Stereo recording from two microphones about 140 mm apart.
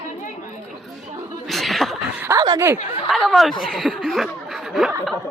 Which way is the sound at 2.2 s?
20° right (ahead or behind).